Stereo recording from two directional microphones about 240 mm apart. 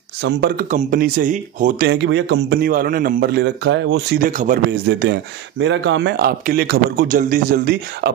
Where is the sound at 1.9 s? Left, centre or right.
Right.